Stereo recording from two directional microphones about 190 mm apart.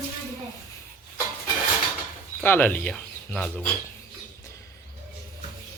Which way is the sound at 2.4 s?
10° left (ahead or behind).